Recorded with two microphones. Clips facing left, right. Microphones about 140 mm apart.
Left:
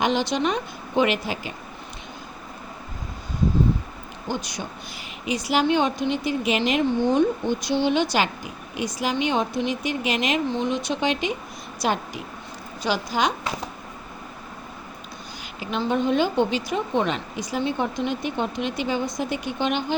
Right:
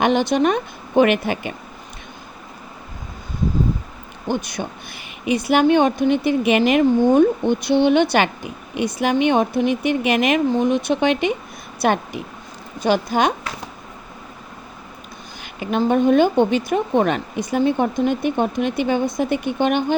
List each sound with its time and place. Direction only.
0.0 s a woman's voice: 55° right (ahead or behind)
4.3 s a woman's voice: 55° right (ahead or behind)
15.6 s speech: 50° right (ahead or behind)